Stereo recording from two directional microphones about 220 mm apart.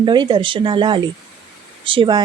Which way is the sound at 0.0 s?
20° right (ahead or behind).